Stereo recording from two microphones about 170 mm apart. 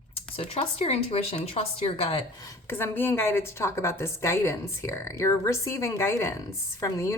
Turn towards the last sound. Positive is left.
turn(degrees=15)  # may be behind; listen again after turning